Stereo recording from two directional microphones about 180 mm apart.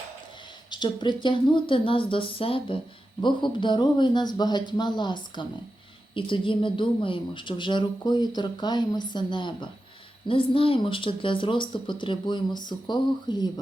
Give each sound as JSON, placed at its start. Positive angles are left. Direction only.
{"t": 0.7, "sound": "speech", "side_deg": 25}